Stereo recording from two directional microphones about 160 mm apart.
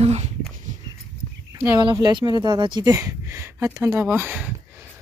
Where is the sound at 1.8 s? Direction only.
25° right (ahead or behind).